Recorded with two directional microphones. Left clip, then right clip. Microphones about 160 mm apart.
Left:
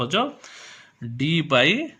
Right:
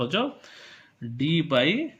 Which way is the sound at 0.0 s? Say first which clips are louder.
Left 3 dB; 40° left (ahead or behind).